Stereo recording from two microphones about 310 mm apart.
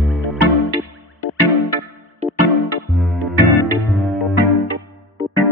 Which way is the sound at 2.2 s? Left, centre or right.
Right.